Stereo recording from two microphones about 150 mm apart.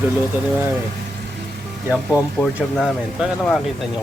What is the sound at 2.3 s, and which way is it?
Speech, centre (ahead or behind).